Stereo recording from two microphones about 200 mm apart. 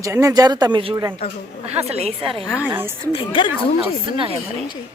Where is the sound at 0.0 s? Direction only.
15° right (ahead or behind).